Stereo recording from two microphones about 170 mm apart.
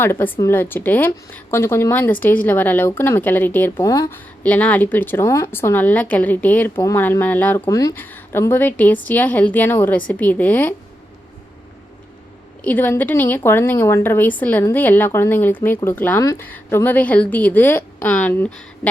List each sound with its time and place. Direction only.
0.0 s speech: 10° left (ahead or behind)
4.4 s speech: 10° left (ahead or behind)
12.6 s speech: 10° left (ahead or behind)